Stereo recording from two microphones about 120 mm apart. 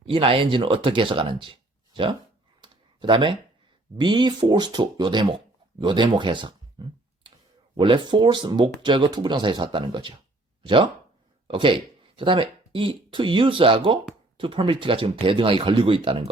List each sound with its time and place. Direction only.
0.0 s speech: 50° right (ahead or behind)
2.6 s clicking: 40° right (ahead or behind)
3.9 s speech: 40° right (ahead or behind)
11.4 s speech: 45° right (ahead or behind)